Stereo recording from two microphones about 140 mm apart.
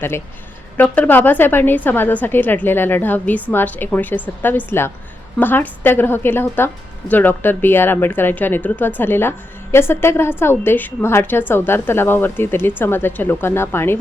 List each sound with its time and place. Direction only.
0.8 s a woman's voice: 15° left (ahead or behind)